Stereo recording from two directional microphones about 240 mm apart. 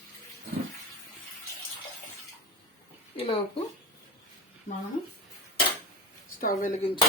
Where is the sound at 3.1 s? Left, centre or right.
Left.